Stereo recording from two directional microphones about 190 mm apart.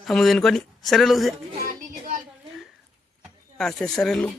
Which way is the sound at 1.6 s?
50° right (ahead or behind).